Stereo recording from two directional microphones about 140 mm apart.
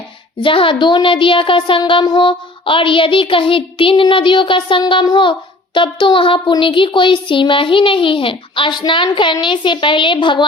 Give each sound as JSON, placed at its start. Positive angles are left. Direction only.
{"t": 0.3, "sound": "a child's voice", "side_deg": 40}